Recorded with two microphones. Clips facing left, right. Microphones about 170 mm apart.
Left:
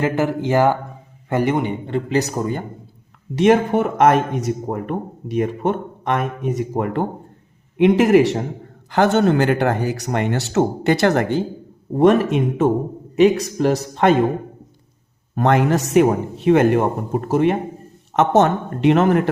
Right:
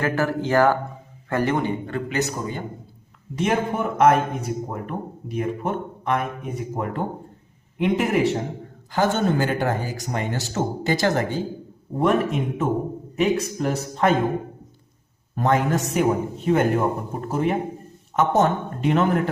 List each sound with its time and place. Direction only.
0.0 s a man's voice: 20° left (ahead or behind)
2.0 s a man's voice: 35° left (ahead or behind)
3.3 s speech: 80° left
8.9 s speech: 70° left (ahead or behind)
11.9 s a man's voice: 85° left
15.4 s speech: 80° left